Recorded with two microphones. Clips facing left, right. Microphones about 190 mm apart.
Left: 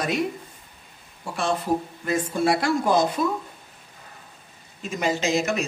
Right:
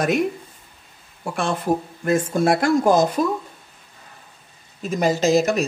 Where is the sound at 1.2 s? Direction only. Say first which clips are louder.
Right 2 dB; 55° right (ahead or behind).